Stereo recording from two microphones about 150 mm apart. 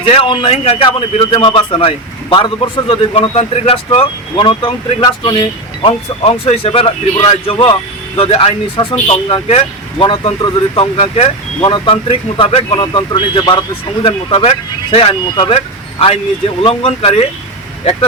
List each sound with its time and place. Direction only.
0.0 s a man's voice: 40° left (ahead or behind)
10.0 s a man's voice: 35° left (ahead or behind)